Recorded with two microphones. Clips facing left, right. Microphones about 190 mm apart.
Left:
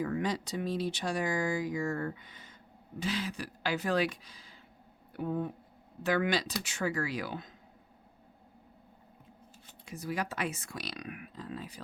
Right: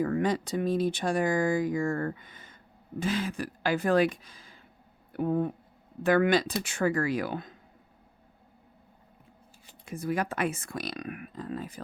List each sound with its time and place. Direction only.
0.0 s speech: 50° right (ahead or behind)
9.8 s speech: 50° right (ahead or behind)